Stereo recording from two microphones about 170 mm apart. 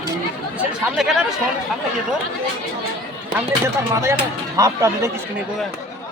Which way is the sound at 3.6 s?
15° right (ahead or behind).